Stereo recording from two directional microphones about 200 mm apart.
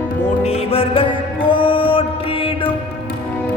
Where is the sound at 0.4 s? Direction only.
30° left (ahead or behind).